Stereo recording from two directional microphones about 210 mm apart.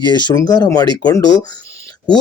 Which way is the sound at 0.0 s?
20° left (ahead or behind).